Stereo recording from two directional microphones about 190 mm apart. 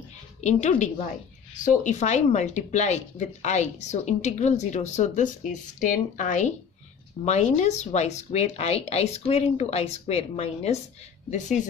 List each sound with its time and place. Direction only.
0.4 s speech: 40° left (ahead or behind)